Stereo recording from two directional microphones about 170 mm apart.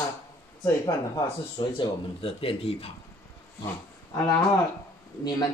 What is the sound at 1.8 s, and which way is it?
Speech, 30° left (ahead or behind).